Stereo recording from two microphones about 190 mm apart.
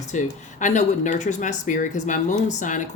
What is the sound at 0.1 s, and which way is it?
Speech, 40° left (ahead or behind).